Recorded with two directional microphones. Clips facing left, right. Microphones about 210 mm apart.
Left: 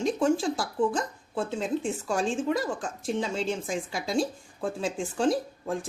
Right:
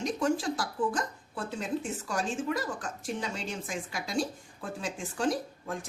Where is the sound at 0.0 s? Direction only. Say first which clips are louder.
Left 4 dB; 30° left (ahead or behind).